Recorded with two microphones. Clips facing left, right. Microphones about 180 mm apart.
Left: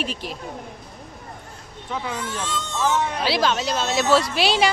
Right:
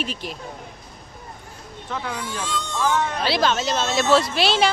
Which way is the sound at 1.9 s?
5° left (ahead or behind).